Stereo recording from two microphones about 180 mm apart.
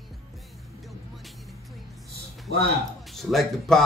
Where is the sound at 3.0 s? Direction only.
Centre (ahead or behind).